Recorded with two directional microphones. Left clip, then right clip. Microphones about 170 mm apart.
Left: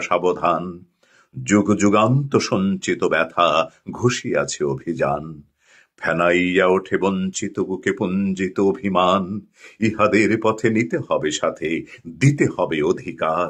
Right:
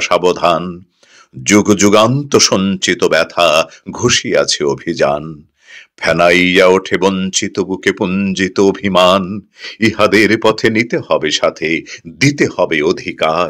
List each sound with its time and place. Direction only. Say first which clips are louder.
0.0 s speech: right 7 dB; 25° right (ahead or behind)